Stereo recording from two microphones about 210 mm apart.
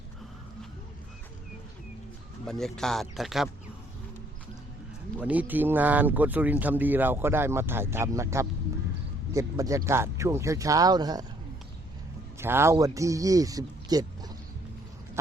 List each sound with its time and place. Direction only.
2.5 s speech: centre (ahead or behind)
5.2 s speech: 5° right (ahead or behind)
12.4 s speech: 10° right (ahead or behind)